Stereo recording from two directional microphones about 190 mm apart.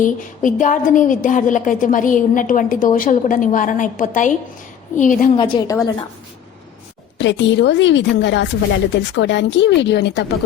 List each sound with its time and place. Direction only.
0.0 s a woman's voice: 40° left (ahead or behind)
5.4 s a woman's voice: 20° left (ahead or behind)
7.2 s speech: 70° left (ahead or behind)